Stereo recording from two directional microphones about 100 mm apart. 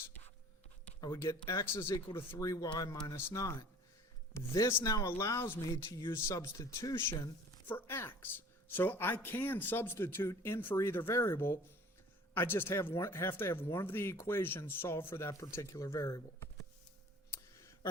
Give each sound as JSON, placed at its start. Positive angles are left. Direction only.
{"t": 1.0, "sound": "speech", "side_deg": 30}
{"t": 2.4, "sound": "speech", "side_deg": 35}